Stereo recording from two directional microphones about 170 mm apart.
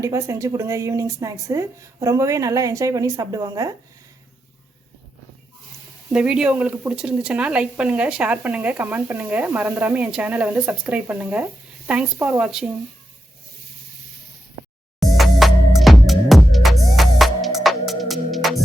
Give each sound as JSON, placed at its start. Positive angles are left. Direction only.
{"t": 0.0, "sound": "speech", "side_deg": -20}
{"t": 6.1, "sound": "speech", "side_deg": -5}
{"t": 15.1, "sound": "music", "side_deg": 0}